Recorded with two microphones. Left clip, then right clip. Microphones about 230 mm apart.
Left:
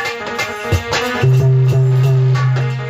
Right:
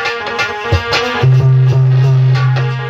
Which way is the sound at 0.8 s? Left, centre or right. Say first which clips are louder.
Right 3 dB; left.